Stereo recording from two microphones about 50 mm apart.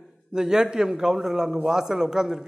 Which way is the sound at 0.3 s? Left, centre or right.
Centre.